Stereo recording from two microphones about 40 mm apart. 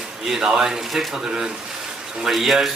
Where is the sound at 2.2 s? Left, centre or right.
Centre.